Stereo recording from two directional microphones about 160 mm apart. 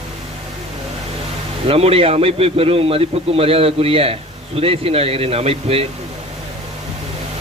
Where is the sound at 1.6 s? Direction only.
35° right (ahead or behind).